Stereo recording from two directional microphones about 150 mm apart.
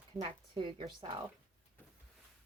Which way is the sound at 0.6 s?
35° right (ahead or behind).